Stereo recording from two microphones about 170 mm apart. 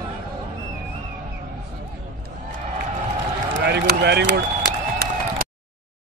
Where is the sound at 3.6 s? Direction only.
70° right (ahead or behind).